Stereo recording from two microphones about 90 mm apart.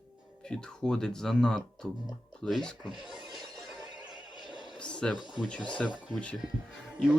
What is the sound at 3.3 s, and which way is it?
Shatter, centre (ahead or behind).